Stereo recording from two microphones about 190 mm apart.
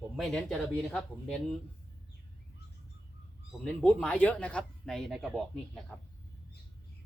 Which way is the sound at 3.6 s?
5° left (ahead or behind).